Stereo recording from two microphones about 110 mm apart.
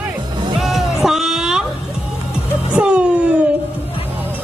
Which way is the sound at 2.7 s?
10° right (ahead or behind).